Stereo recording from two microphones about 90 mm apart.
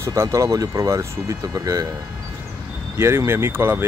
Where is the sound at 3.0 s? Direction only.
30° right (ahead or behind).